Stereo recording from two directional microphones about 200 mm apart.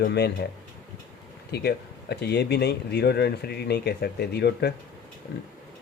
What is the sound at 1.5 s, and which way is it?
Speech, 55° left (ahead or behind).